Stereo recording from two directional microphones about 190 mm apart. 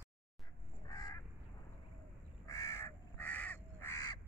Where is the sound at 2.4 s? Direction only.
15° left (ahead or behind).